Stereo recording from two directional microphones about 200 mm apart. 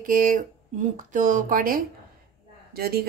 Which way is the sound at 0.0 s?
45° right (ahead or behind).